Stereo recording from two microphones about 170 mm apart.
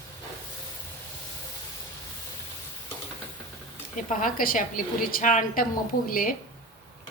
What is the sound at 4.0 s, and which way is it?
A woman's voice, 55° left (ahead or behind).